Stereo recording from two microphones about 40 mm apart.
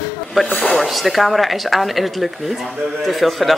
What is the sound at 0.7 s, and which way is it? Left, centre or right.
Speech, centre.